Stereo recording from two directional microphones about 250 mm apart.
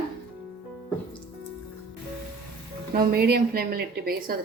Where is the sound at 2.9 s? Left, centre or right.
Right.